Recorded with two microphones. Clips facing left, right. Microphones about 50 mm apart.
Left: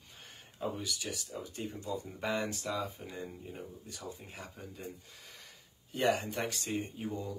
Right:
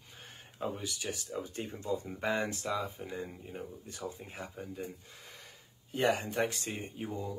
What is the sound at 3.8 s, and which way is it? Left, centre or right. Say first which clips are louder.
Speech: right 3 dB; right.